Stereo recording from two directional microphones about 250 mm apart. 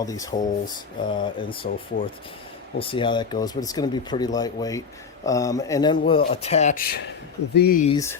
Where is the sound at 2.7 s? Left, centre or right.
Left.